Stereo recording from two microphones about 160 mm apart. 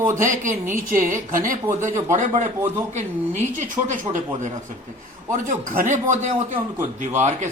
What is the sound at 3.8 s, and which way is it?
Speech, 55° right (ahead or behind).